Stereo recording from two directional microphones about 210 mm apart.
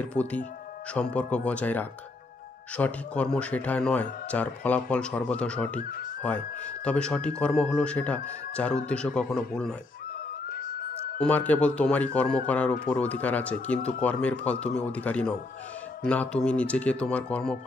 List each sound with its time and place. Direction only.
0.1 s a man's voice: 5° left (ahead or behind)
5.8 s speech: 40° left (ahead or behind)
6.2 s a man's voice: 5° left (ahead or behind)
11.1 s a man's voice: 5° left (ahead or behind)